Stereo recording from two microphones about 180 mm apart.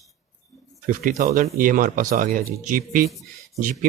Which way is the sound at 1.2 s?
45° right (ahead or behind).